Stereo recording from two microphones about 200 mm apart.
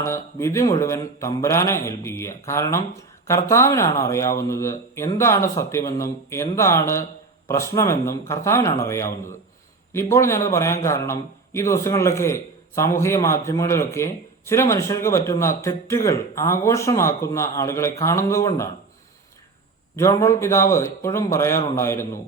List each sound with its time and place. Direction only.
0.0 s a man's voice: 15° left (ahead or behind)
20.0 s a man's voice: 15° left (ahead or behind)